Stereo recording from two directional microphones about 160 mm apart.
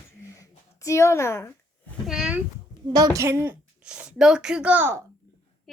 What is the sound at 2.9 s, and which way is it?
A woman's voice, 20° right (ahead or behind).